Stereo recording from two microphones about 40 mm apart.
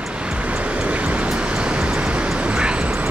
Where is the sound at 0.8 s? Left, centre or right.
Right.